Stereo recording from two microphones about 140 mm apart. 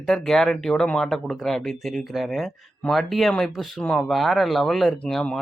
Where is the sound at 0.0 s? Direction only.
5° left (ahead or behind).